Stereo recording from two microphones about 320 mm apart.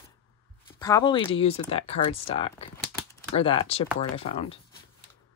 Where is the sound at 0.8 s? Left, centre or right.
Centre.